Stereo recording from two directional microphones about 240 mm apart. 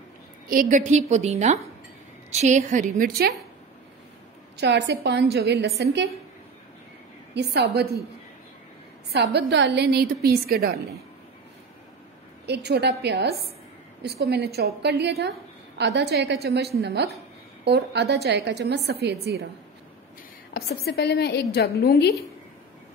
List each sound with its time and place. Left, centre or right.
0.5 s a woman's voice: right
4.6 s a woman's voice: right
7.3 s a woman's voice: right
9.1 s a woman's voice: right
12.4 s a woman's voice: right
20.5 s a woman's voice: left